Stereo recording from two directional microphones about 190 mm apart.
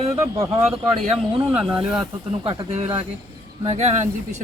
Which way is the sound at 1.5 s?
5° right (ahead or behind).